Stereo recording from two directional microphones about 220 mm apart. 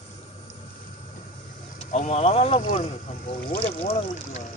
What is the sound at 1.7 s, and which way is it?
Speech, 30° left (ahead or behind).